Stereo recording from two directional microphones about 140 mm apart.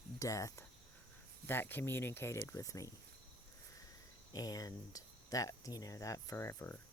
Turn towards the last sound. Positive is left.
turn(degrees=20)  # may be behind; listen again after turning